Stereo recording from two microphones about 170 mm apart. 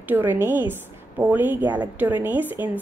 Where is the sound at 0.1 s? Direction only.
10° right (ahead or behind).